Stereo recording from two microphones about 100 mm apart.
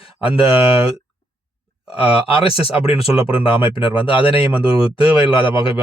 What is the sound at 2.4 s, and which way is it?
Speech, 70° left (ahead or behind).